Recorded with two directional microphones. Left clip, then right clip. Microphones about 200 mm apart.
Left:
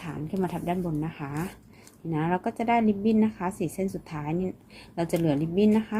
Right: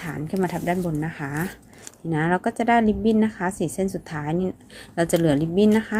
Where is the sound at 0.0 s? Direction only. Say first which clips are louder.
Right 5 dB; 20° right (ahead or behind).